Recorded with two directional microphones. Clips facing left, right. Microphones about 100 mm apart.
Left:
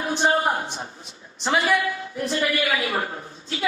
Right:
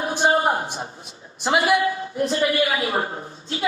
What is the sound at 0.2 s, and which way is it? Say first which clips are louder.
Speech: right 3 dB; 30° right (ahead or behind).